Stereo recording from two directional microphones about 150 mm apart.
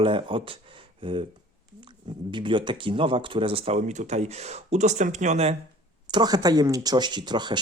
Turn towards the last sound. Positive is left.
turn(degrees=-30)  # may be behind; listen again after turning